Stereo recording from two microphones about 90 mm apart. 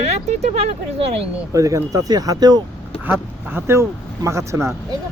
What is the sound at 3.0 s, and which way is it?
Speech, 20° right (ahead or behind).